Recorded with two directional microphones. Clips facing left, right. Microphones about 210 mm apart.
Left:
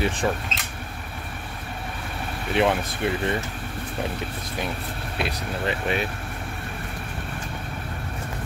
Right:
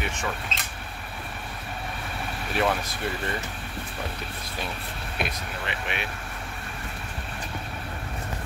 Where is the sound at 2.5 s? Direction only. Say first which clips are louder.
Left 4 dB; 20° left (ahead or behind).